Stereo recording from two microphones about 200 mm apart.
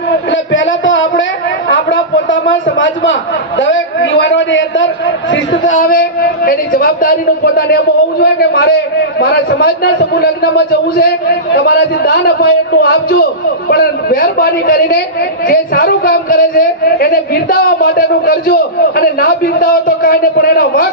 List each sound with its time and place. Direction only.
0.1 s a man's voice: 65° left (ahead or behind)
5.7 s a man's voice: 45° left (ahead or behind)